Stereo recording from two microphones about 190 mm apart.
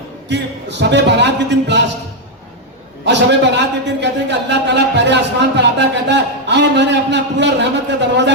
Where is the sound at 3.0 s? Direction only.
65° right (ahead or behind).